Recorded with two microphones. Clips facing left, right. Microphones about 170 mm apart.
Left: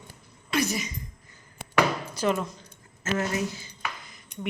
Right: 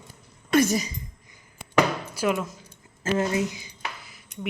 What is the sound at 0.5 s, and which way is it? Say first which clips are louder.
Speech: right 6 dB; 45° right (ahead or behind).